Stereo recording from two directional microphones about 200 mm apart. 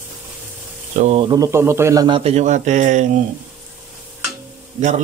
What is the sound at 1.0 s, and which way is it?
Speech, 30° right (ahead or behind).